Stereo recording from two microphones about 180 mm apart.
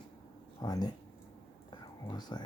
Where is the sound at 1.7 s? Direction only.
25° left (ahead or behind).